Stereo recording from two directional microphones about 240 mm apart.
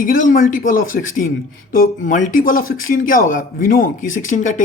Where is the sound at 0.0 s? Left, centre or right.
Left.